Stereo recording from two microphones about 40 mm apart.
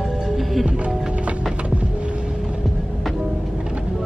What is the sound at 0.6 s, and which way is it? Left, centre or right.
Speech, right.